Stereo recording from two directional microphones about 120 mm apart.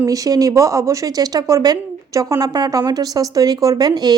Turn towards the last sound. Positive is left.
turn(degrees=-35)  # may be behind; listen again after turning